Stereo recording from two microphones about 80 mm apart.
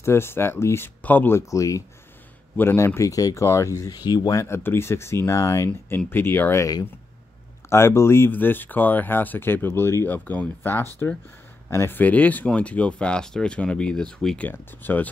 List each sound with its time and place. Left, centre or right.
0.0 s speech: left
1.3 s speech: left
2.5 s speech: left
3.9 s speech: left
5.9 s speech: left
6.6 s speech: left; by 14.5 s centre
14.5 s speech: left